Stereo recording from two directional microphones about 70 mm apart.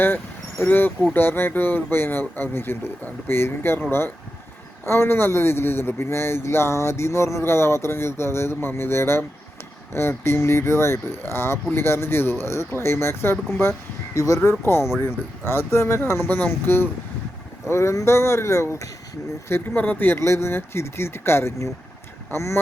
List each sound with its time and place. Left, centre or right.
0.6 s speech: left
19.7 s speech: left